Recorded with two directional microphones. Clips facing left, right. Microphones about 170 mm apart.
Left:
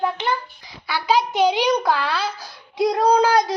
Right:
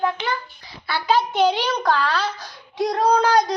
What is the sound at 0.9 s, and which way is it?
A child's voice, 10° left (ahead or behind).